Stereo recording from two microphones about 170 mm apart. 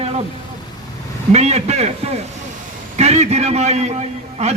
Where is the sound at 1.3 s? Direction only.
40° right (ahead or behind).